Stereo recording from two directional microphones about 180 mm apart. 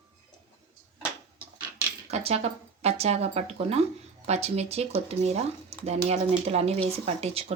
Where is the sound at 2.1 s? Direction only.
35° right (ahead or behind).